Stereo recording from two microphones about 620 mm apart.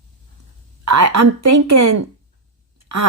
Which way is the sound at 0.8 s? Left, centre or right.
Right.